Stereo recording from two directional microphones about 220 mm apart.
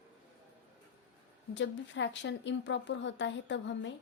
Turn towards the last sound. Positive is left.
turn(degrees=55)  # may be behind; listen again after turning